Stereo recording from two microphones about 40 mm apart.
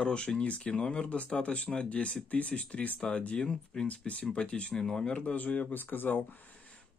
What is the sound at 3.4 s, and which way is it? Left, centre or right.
Speech, centre.